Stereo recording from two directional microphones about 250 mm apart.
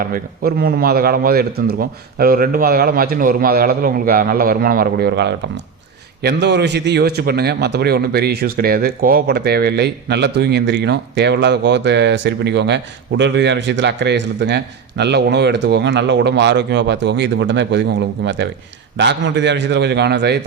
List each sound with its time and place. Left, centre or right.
0.1 s a man's voice: right